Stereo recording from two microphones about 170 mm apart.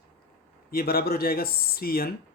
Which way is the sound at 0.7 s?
60° left (ahead or behind).